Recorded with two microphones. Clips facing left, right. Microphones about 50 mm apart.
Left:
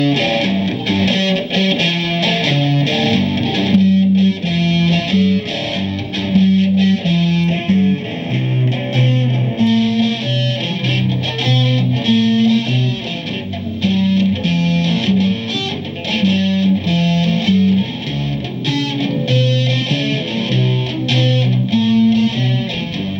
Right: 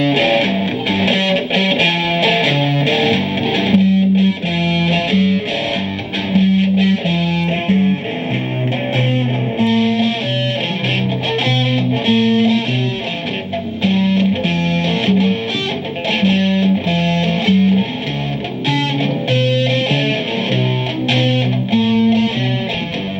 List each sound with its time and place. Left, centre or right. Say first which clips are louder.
0.0 s music: right 1 dB; centre
9.1 s music: right 1 dB; centre
11.7 s music: right 1 dB; centre
13.8 s music: even; centre
19.3 s music: right 5 dB; centre
21.1 s music: right 1 dB; centre